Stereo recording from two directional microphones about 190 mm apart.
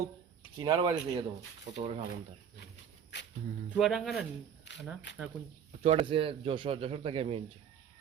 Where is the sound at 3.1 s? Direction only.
65° left (ahead or behind).